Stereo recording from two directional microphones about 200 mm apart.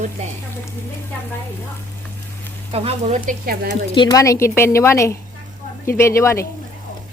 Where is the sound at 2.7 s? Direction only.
30° right (ahead or behind).